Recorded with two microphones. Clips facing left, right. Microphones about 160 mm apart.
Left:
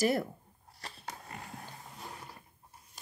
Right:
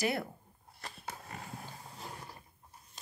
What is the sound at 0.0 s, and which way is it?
Speech, 40° left (ahead or behind).